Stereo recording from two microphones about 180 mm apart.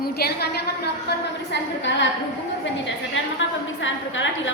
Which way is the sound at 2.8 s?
90° left.